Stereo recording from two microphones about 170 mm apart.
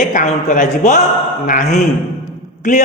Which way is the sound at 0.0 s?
50° left (ahead or behind).